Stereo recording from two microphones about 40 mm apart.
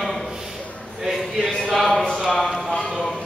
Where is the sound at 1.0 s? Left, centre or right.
Centre.